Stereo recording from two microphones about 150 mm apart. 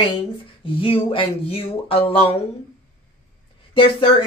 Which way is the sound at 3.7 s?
35° left (ahead or behind).